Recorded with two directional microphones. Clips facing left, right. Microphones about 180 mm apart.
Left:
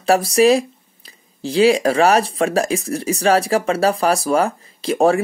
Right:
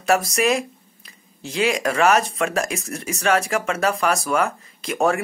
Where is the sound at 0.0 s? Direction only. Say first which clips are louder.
Left 6 dB; 30° left (ahead or behind).